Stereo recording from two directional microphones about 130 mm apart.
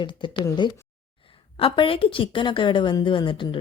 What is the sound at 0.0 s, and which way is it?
Speech, 40° left (ahead or behind).